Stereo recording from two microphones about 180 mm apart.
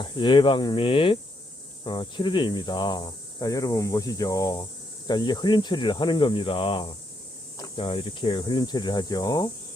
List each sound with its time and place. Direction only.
0.0 s speech: 25° left (ahead or behind)